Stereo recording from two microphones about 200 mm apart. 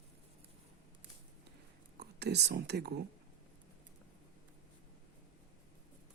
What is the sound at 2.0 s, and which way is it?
Speech, 55° right (ahead or behind).